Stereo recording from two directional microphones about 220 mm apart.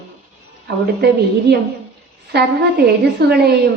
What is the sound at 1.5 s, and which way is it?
A woman's voice, 50° right (ahead or behind).